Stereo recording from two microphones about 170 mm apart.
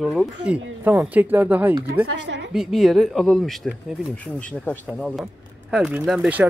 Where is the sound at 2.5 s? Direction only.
Centre (ahead or behind).